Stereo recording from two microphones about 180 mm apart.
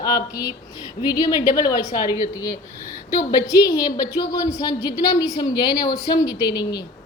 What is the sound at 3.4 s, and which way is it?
A woman's voice, 20° left (ahead or behind).